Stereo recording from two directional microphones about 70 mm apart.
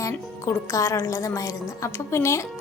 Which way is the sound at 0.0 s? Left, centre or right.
Left.